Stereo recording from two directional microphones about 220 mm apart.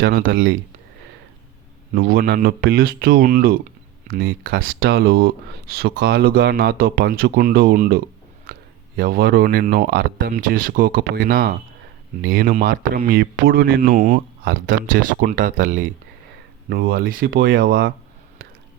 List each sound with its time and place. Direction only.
0.0 s speech: 45° right (ahead or behind)
2.0 s speech: 40° right (ahead or behind)